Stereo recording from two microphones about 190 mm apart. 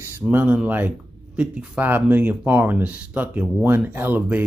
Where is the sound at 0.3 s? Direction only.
10° right (ahead or behind).